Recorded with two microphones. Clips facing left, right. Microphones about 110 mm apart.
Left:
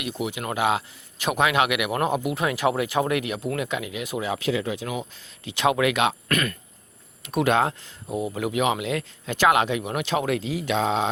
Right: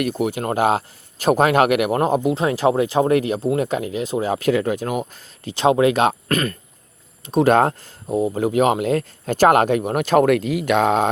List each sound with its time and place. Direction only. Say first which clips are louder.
0.0 s speech: right 8 dB; 45° right (ahead or behind)
5.5 s speech: right 6 dB; 30° right (ahead or behind)
7.5 s speech: right 5 dB; 45° right (ahead or behind)
8.0 s speech: right 7 dB; 30° right (ahead or behind); by 11.1 s 55° right (ahead or behind)